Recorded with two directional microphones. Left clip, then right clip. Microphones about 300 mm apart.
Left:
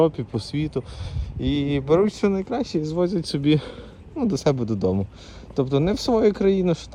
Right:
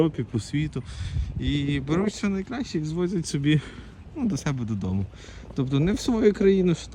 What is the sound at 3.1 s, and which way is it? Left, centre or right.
Speech, centre.